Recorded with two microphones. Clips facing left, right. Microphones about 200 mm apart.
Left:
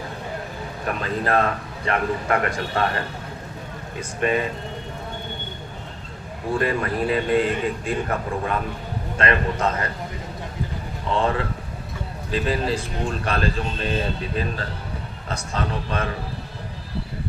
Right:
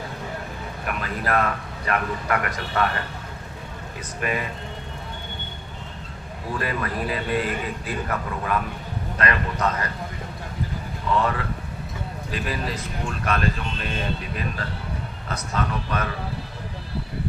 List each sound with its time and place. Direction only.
0.9 s a man's voice: 30° left (ahead or behind)
4.2 s a man's voice: 30° left (ahead or behind)
6.5 s a man's voice: 30° left (ahead or behind)
11.1 s a man's voice: 30° left (ahead or behind)